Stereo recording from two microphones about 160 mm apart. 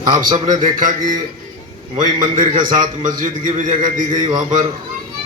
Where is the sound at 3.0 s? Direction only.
50° right (ahead or behind).